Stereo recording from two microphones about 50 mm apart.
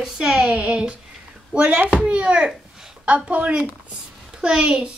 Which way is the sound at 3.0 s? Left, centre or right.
Right.